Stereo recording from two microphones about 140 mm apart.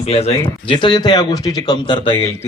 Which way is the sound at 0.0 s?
50° left (ahead or behind).